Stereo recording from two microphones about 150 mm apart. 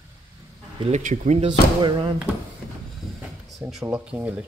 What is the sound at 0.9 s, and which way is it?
Speech, 55° right (ahead or behind).